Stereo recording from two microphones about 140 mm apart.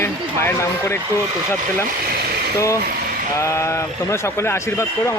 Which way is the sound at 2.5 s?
20° left (ahead or behind).